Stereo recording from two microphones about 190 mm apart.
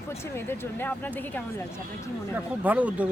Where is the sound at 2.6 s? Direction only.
10° right (ahead or behind).